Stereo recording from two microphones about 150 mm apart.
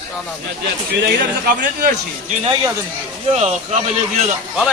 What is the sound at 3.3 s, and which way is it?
Speech, 45° right (ahead or behind).